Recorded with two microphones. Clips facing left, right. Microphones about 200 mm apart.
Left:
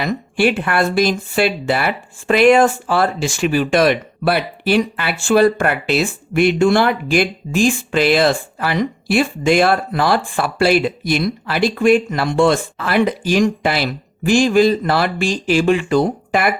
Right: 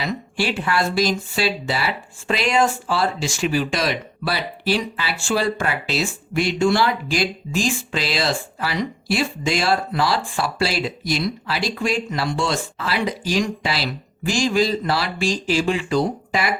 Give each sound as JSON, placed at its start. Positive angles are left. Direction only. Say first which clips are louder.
{"t": 0.0, "sound": "speech", "louder": "left 7 dB", "side_deg": 55}